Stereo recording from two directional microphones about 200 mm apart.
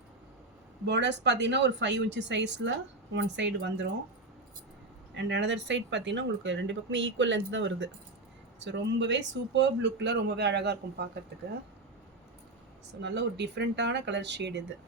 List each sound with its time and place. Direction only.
0.9 s speech: 60° right (ahead or behind)
5.1 s speech: 65° right (ahead or behind)
13.0 s speech: 60° right (ahead or behind)